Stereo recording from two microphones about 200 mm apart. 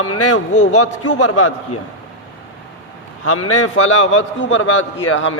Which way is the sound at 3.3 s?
90° left.